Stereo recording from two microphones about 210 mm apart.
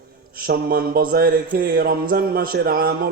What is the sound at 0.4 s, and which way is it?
A man's voice, 45° right (ahead or behind).